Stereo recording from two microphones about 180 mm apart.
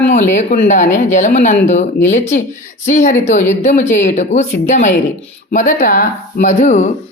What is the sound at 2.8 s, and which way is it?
Speech, 45° left (ahead or behind).